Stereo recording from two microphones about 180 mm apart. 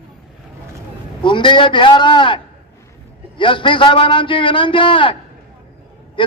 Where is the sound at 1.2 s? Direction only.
25° left (ahead or behind).